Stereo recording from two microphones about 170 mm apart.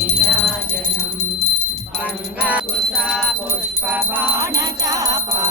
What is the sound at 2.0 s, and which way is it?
Music, 10° right (ahead or behind).